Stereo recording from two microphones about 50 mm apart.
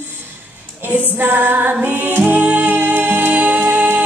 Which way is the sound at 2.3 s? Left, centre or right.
Right.